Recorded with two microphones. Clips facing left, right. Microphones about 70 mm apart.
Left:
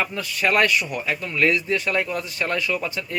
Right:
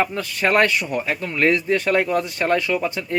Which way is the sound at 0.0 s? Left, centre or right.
Right.